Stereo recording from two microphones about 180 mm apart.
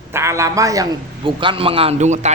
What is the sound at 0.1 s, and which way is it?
A man's voice, 15° right (ahead or behind).